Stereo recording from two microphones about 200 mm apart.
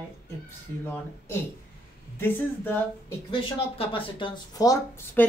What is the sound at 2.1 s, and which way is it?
Speech, 10° left (ahead or behind).